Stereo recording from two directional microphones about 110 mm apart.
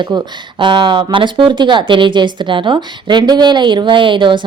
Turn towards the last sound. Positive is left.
turn(degrees=-45)  # may be behind; listen again after turning